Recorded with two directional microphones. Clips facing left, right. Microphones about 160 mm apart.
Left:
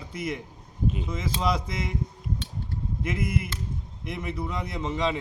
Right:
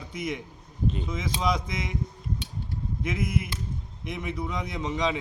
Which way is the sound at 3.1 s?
5° left (ahead or behind).